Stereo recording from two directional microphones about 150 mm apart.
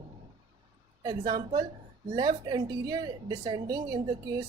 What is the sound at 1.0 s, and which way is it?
A woman's voice, 30° right (ahead or behind).